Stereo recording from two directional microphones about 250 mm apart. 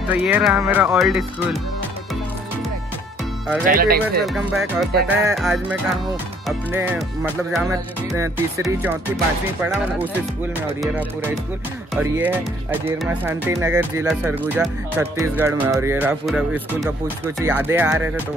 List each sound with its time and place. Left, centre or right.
0.1 s speech: centre
3.6 s speech: right
4.2 s speech: centre
8.6 s speech: centre
11.9 s speech: centre